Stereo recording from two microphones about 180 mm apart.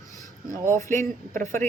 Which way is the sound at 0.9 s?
45° right (ahead or behind).